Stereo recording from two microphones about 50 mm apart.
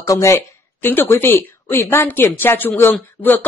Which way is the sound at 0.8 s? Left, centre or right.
Left.